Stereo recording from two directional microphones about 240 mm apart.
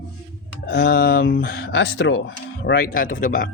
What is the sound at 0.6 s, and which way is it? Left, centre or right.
Speech, left.